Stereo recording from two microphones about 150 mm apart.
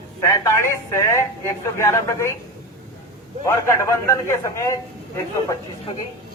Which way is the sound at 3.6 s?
20° left (ahead or behind).